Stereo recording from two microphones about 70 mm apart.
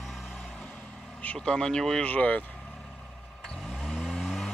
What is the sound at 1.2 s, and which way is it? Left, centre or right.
Speech, centre.